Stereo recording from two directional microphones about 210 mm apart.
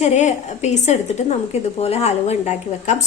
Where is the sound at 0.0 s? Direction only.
35° left (ahead or behind).